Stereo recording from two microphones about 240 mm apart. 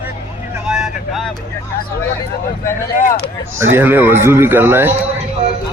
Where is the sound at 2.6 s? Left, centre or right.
Left.